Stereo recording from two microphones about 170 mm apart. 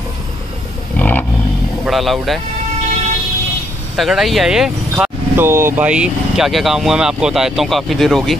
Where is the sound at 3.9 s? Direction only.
Centre (ahead or behind).